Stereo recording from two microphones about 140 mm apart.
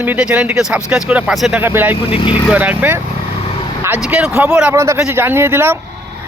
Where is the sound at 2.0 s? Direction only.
40° left (ahead or behind).